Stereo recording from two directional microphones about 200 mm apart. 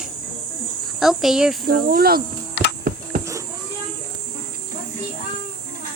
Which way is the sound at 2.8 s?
45° right (ahead or behind).